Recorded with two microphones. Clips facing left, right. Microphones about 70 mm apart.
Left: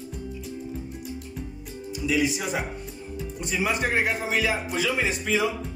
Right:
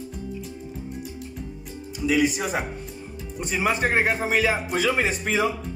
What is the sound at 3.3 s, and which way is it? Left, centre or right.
Speech, right.